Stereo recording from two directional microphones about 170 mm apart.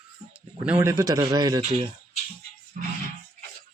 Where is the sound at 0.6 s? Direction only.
10° right (ahead or behind).